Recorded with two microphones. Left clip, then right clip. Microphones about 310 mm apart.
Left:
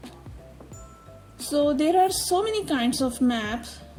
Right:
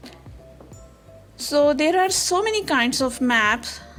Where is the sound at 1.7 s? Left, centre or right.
Right.